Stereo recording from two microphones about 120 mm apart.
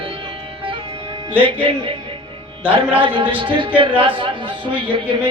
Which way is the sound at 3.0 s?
45° right (ahead or behind).